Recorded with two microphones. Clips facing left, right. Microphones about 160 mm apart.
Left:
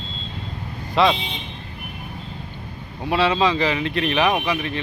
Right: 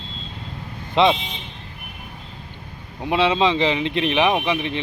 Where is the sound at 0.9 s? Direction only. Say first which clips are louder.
Right 1 dB; 20° right (ahead or behind).